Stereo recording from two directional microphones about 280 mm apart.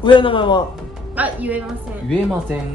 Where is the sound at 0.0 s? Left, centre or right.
Centre.